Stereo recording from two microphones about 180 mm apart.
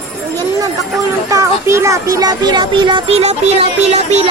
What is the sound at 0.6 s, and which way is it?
Speech, 20° right (ahead or behind).